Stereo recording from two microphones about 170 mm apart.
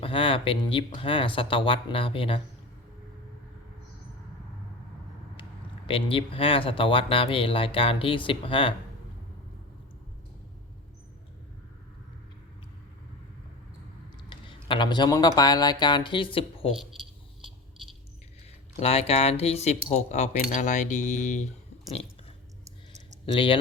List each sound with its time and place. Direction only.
0.0 s speech: 30° left (ahead or behind)
5.4 s speech: 30° left (ahead or behind)
14.3 s speech: 30° left (ahead or behind)
18.8 s speech: 35° left (ahead or behind)
23.2 s speech: 30° left (ahead or behind)